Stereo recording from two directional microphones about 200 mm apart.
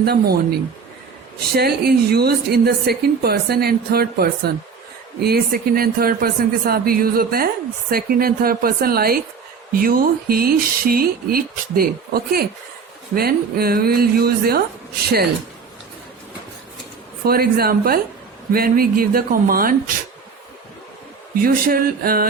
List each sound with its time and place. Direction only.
0.0 s speech: 50° right (ahead or behind)
17.2 s speech: 50° right (ahead or behind)
21.4 s speech: 45° right (ahead or behind)